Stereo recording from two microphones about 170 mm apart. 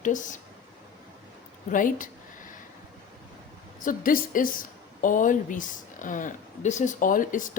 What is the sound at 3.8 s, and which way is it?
A woman's voice, 55° left (ahead or behind).